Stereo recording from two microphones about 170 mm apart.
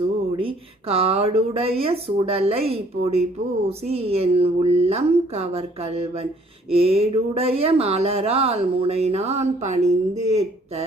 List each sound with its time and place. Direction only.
0.3 s speech: 35° right (ahead or behind)